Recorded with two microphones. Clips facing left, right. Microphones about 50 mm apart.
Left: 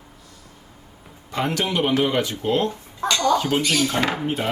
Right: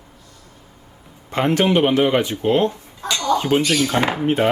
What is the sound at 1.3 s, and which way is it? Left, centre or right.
Speech, right.